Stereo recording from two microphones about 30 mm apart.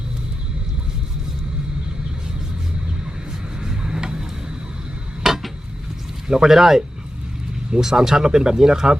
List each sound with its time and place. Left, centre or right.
3.6 s rub: right
5.2 s a sound: centre
6.2 s speech: centre